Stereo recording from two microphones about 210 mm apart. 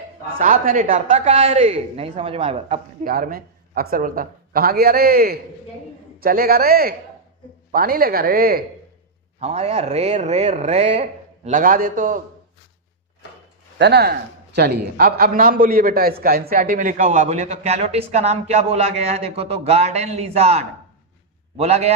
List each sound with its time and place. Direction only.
0.3 s speech: 40° right (ahead or behind)
3.0 s speech: 45° right (ahead or behind)
9.4 s speech: 30° right (ahead or behind)
13.7 s speech: 50° right (ahead or behind); by 21.9 s 30° right (ahead or behind)